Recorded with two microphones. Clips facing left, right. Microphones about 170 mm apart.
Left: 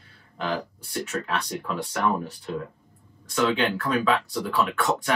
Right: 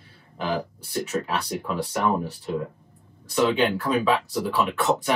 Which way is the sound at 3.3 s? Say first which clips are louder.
Right 2 dB; 5° right (ahead or behind).